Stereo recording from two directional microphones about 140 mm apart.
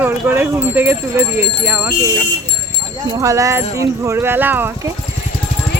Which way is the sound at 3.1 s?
20° right (ahead or behind).